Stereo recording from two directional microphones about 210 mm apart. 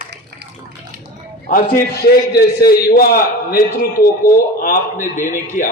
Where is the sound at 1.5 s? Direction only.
40° left (ahead or behind).